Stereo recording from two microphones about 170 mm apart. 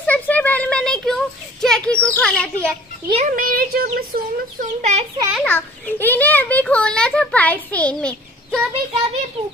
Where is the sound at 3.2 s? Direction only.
55° right (ahead or behind).